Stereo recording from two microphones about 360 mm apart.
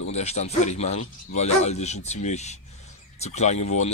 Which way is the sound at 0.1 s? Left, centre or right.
Centre.